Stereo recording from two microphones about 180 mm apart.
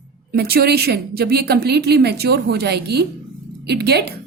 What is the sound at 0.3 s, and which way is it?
A woman's voice, 60° right (ahead or behind).